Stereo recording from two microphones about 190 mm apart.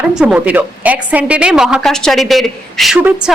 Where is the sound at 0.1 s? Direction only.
5° right (ahead or behind).